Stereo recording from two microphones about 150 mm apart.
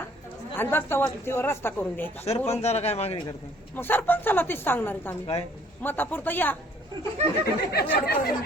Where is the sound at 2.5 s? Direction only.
45° left (ahead or behind).